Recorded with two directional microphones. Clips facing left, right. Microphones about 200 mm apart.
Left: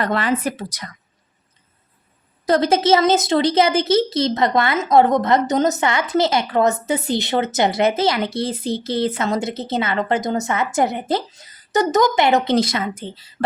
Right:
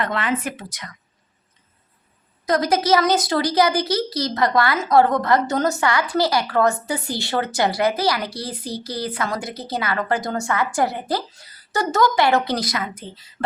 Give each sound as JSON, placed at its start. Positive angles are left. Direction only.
{"t": 0.0, "sound": "speech", "side_deg": 35}
{"t": 2.5, "sound": "speech", "side_deg": 25}